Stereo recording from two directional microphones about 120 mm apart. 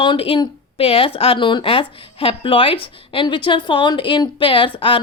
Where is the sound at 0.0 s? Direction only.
45° left (ahead or behind).